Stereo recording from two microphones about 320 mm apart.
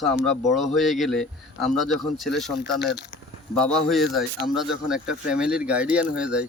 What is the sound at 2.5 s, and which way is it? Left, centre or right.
Speech, left.